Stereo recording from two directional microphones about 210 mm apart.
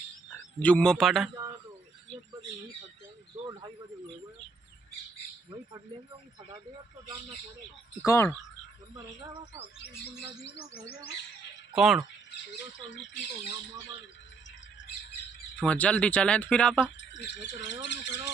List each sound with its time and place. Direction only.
0.3 s a man's voice: 5° left (ahead or behind)
8.0 s speech: 15° left (ahead or behind)
11.7 s speech: centre (ahead or behind)
12.7 s speech: 60° left (ahead or behind)
14.8 s bird: 60° left (ahead or behind)
15.6 s speech: 5° left (ahead or behind)
17.0 s speech: 60° left (ahead or behind)